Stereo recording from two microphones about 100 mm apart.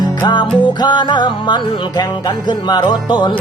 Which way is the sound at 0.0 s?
45° left (ahead or behind).